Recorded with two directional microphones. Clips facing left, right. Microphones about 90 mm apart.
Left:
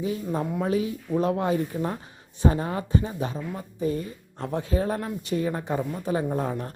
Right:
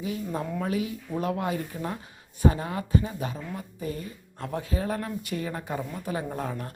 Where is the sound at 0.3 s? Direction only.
20° left (ahead or behind).